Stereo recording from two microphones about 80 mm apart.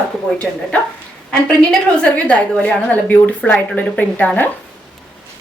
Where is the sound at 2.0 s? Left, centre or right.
Centre.